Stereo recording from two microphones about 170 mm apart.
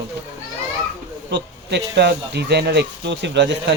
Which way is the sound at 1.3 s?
90° right.